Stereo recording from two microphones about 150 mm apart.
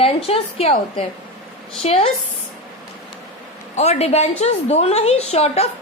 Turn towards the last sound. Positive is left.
turn(degrees=45)  # may be behind; listen again after turning